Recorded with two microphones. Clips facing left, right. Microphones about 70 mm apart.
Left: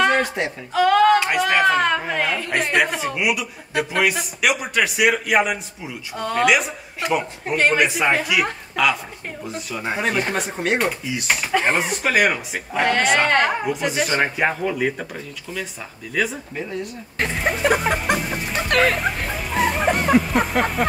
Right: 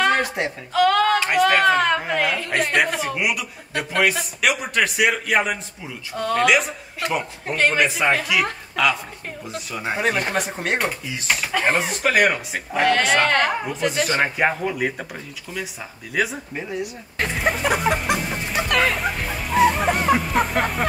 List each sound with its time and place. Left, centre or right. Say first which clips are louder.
0.0 s a sound: left 1 dB; centre
0.7 s a woman's voice: left 3 dB; centre
16.2 s speech: even; centre
18.7 s speech: left 3 dB; left
18.9 s music: left 1 dB; centre